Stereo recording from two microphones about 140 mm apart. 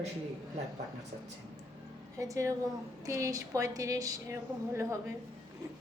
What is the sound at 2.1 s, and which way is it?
A woman's voice, 20° right (ahead or behind).